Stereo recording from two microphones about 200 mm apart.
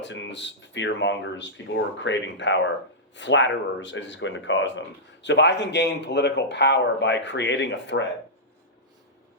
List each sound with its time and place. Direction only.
0.0 s speech: 65° left (ahead or behind)